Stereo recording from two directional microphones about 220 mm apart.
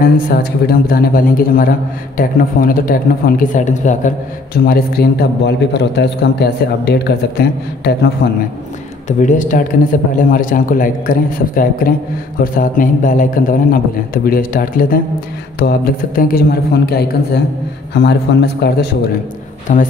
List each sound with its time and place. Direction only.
0.0 s a man's voice: 45° left (ahead or behind)
4.6 s a man's voice: 45° left (ahead or behind)
9.2 s a man's voice: 35° left (ahead or behind)
19.7 s a man's voice: 35° left (ahead or behind)